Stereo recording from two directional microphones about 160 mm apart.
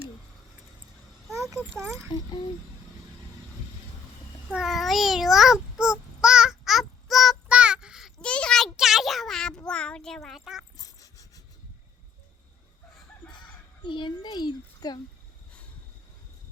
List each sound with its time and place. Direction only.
1.7 s speech: 15° right (ahead or behind)
2.1 s a child's voice: 30° left (ahead or behind)
4.5 s a sound: centre (ahead or behind)
5.8 s child singing: 5° right (ahead or behind)
10.8 s dog: 20° left (ahead or behind)
13.8 s a child's voice: 30° left (ahead or behind)